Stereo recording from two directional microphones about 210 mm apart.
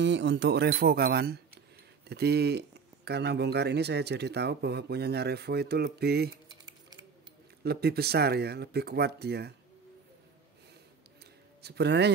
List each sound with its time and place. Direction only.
0.0 s speech: 55° right (ahead or behind)
11.6 s speech: 50° right (ahead or behind)